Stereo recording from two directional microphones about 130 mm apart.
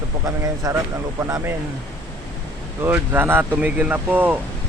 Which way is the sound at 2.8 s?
15° right (ahead or behind).